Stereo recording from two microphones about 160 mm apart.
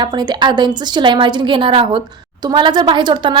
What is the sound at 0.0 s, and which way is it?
A woman's voice, 30° right (ahead or behind).